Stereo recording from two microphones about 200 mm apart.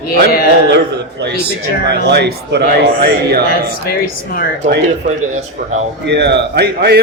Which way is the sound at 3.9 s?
50° left (ahead or behind).